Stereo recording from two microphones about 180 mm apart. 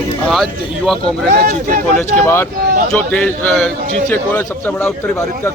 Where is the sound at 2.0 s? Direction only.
10° left (ahead or behind).